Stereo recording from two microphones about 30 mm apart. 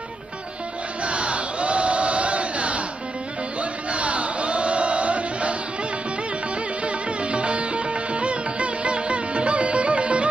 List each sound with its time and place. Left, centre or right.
1.0 s crowd: right
3.6 s music: right
6.8 s sitar: right